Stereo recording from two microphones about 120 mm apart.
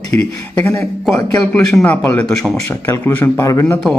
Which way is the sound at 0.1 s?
20° left (ahead or behind).